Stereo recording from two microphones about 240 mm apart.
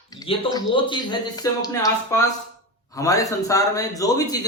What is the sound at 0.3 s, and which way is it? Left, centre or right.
A man's voice, centre.